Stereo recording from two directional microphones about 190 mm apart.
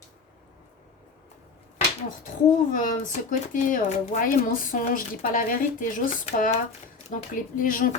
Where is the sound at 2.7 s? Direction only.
45° left (ahead or behind).